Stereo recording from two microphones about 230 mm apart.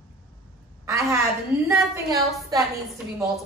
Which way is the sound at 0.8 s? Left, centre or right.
Centre.